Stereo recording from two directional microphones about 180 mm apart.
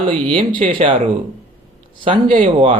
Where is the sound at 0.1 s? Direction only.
30° right (ahead or behind).